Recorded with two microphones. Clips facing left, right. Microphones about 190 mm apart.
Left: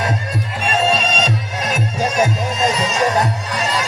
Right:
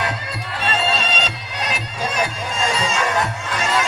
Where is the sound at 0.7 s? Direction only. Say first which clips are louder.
Left 5 dB; 45° left (ahead or behind).